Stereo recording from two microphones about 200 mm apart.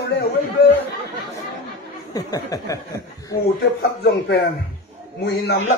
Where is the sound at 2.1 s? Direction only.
15° left (ahead or behind).